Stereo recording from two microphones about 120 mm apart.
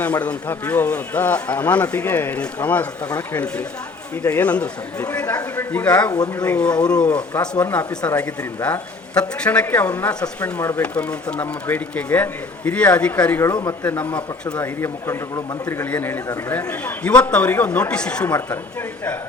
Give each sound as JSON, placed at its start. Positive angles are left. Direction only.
{"t": 0.0, "sound": "speech", "side_deg": 15}
{"t": 6.1, "sound": "speech", "side_deg": 35}
{"t": 6.4, "sound": "speech", "side_deg": 10}
{"t": 10.8, "sound": "speech", "side_deg": 10}
{"t": 13.5, "sound": "speech", "side_deg": 35}
{"t": 13.8, "sound": "speech", "side_deg": 15}
{"t": 14.1, "sound": "speech", "side_deg": 35}
{"t": 14.6, "sound": "speech", "side_deg": 20}
{"t": 18.3, "sound": "speech", "side_deg": 20}